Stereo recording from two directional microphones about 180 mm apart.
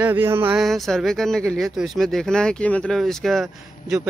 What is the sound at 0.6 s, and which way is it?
Speech, centre (ahead or behind).